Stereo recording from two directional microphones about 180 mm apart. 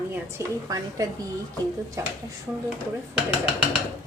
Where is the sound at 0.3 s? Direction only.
20° right (ahead or behind).